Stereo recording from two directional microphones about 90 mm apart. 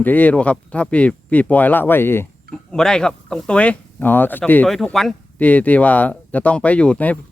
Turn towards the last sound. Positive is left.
turn(degrees=15)  # may be behind; listen again after turning